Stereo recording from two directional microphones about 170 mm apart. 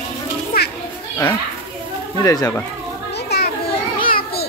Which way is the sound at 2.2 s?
20° left (ahead or behind).